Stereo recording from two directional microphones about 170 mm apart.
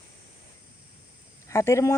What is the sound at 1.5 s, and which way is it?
Speech, 15° left (ahead or behind).